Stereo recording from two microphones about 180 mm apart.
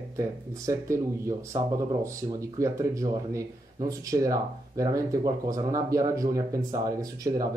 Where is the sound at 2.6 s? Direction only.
15° right (ahead or behind).